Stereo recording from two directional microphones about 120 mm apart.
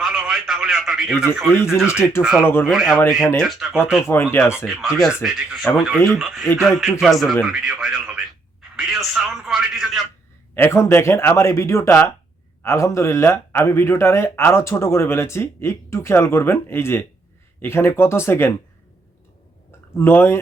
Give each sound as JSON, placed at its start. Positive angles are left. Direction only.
{"t": 0.2, "sound": "a man's voice", "side_deg": 0}
{"t": 1.5, "sound": "a man's voice", "side_deg": 20}
{"t": 2.2, "sound": "a man's voice", "side_deg": -5}
{"t": 4.0, "sound": "a man's voice", "side_deg": 20}
{"t": 4.5, "sound": "a man's voice", "side_deg": -5}
{"t": 10.5, "sound": "a man's voice", "side_deg": 20}
{"t": 20.0, "sound": "a man's voice", "side_deg": 20}